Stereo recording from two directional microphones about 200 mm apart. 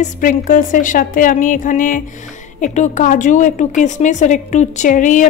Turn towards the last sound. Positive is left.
turn(degrees=40)  # may be behind; listen again after turning